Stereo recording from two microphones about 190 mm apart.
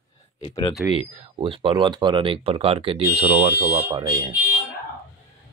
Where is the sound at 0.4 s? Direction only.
25° left (ahead or behind).